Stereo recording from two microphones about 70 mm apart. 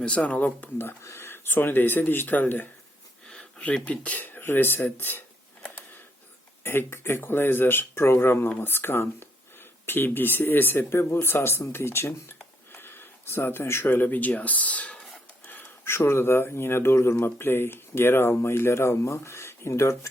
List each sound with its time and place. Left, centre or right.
0.0 s speech: centre
1.0 s speech: left
3.2 s a sound: centre
3.8 s speech: left
6.6 s speech: left
15.4 s speech: left